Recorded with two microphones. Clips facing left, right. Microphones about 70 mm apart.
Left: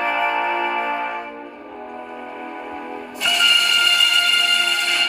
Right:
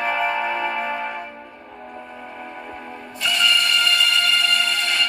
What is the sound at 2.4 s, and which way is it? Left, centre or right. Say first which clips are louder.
Music: left 4 dB; left.